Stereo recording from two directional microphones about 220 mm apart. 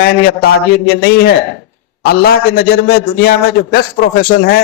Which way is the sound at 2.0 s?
45° left (ahead or behind).